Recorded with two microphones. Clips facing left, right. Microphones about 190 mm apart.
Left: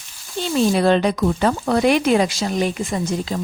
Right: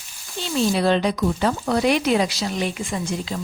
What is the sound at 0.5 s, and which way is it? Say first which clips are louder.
Speech: left 3 dB; 50° left (ahead or behind).